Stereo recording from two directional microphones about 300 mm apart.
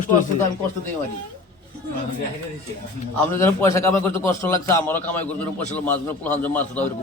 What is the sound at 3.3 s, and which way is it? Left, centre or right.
A man's voice, centre.